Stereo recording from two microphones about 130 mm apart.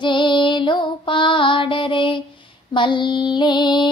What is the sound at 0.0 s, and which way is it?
Music, 40° left (ahead or behind).